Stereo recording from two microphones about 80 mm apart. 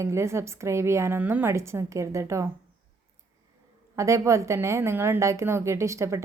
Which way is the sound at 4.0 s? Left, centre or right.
Right.